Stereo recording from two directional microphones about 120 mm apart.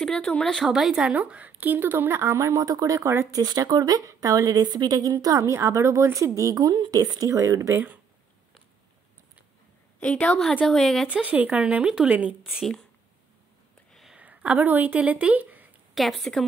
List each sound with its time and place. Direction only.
0.0 s speech: 5° left (ahead or behind); by 7.8 s 25° right (ahead or behind)
9.9 s a woman's voice: 10° left (ahead or behind)
11.1 s speech: 10° right (ahead or behind)
12.5 s a woman's voice: centre (ahead or behind)
13.9 s a sound: 5° right (ahead or behind)
14.2 s speech: 10° right (ahead or behind)
15.9 s a woman's voice: centre (ahead or behind)